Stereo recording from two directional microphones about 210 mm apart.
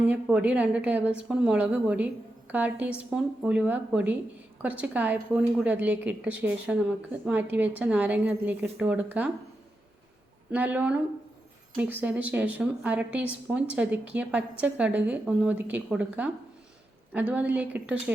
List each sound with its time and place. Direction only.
0.0 s a woman's voice: 5° right (ahead or behind)
10.5 s a woman's voice: 10° right (ahead or behind)